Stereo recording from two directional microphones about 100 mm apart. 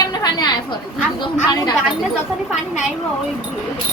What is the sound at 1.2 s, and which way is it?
Speech, 45° left (ahead or behind).